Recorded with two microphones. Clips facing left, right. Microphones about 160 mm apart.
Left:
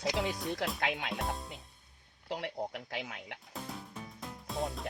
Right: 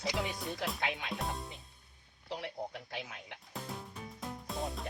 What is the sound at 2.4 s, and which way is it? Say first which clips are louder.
Speech: left 3 dB; 70° left (ahead or behind).